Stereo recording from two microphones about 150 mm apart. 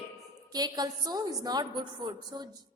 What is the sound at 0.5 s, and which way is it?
A woman's voice, 25° right (ahead or behind).